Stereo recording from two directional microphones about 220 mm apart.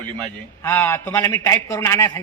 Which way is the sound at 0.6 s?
10° left (ahead or behind).